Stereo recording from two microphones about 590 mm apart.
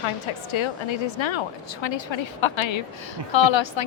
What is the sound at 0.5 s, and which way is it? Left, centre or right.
A woman's voice, left.